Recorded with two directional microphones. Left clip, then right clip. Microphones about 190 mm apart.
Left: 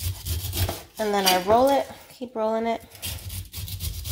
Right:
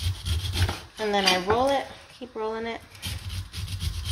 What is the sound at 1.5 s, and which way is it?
Speech, 45° left (ahead or behind).